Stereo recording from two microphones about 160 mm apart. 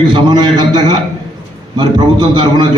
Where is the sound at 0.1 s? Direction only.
30° right (ahead or behind).